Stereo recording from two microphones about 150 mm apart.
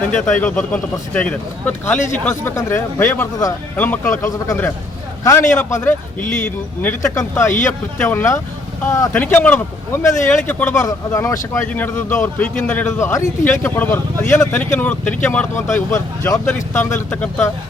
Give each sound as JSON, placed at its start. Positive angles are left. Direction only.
{"t": 0.1, "sound": "a man's voice", "side_deg": 10}